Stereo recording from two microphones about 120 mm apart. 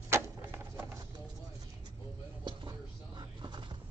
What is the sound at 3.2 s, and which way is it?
Music, 40° right (ahead or behind).